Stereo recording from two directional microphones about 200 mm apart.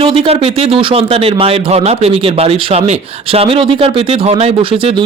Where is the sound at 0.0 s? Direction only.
25° right (ahead or behind).